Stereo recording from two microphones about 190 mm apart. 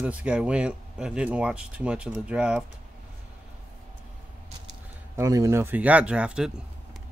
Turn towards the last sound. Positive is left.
turn(degrees=-5)  # may be behind; listen again after turning